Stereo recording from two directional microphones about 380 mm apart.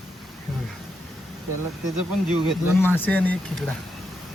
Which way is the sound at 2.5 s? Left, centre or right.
Centre.